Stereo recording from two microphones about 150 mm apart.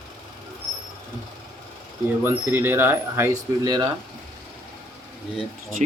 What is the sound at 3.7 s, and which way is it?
Speech, 25° right (ahead or behind).